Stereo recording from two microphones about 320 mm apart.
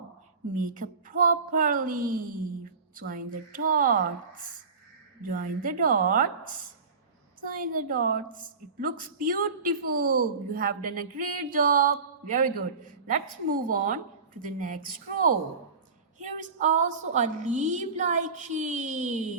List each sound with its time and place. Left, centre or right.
0.5 s a woman's voice: right